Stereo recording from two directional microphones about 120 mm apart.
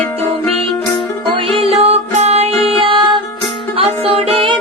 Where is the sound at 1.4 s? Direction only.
50° right (ahead or behind).